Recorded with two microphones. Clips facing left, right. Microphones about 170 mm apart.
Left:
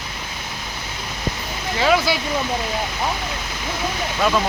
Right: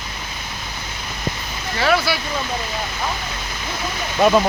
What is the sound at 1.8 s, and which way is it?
Speech, 15° left (ahead or behind).